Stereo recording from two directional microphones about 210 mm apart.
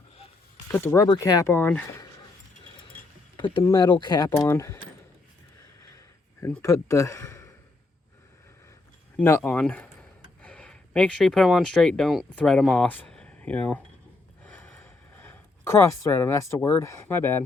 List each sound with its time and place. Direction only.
0.7 s speech: 10° left (ahead or behind)
3.3 s speech: 20° left (ahead or behind)
6.4 s speech: 15° left (ahead or behind)
9.1 s speech: 10° left (ahead or behind)
14.4 s a sound: 10° left (ahead or behind)